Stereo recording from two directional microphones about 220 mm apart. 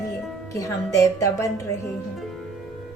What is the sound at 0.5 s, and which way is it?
Music, 15° left (ahead or behind).